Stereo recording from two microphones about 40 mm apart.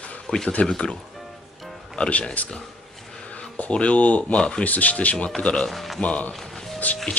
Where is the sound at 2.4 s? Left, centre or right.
Left.